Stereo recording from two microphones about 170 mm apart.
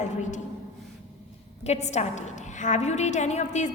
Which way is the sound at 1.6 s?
40° left (ahead or behind).